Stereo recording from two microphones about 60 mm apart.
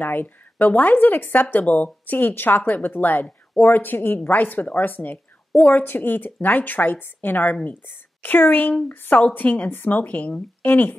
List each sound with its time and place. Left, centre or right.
0.0 s a woman's voice: left